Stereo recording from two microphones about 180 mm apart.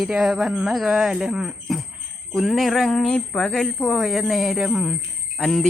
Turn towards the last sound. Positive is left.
turn(degrees=0)  # may be behind; listen again after turning